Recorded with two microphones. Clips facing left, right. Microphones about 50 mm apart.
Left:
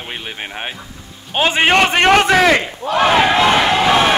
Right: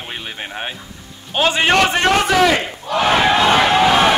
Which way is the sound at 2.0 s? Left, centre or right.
Left.